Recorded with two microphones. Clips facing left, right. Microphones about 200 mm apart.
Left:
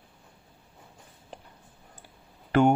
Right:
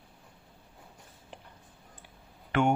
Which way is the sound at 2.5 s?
40° left (ahead or behind).